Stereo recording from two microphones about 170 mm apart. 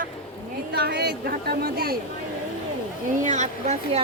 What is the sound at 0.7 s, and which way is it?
A woman's voice, 70° right (ahead or behind).